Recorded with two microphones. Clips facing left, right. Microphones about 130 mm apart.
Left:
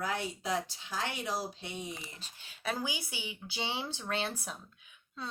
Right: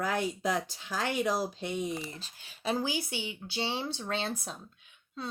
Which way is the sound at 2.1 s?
35° right (ahead or behind).